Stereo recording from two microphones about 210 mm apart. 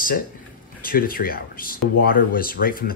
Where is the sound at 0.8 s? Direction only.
45° left (ahead or behind).